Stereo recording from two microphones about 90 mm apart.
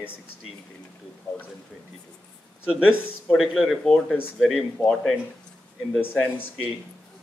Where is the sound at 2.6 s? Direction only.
10° right (ahead or behind).